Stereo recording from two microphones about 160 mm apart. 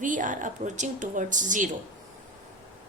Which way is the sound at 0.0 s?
55° right (ahead or behind).